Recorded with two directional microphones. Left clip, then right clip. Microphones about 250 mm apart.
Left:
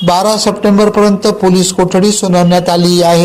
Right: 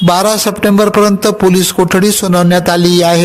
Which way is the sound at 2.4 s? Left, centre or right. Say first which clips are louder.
Even; right.